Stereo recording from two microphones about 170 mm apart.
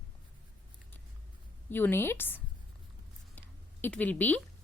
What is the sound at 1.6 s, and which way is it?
Speech, 10° left (ahead or behind).